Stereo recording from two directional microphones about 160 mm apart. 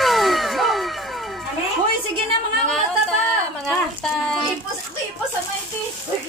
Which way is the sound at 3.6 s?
5° left (ahead or behind).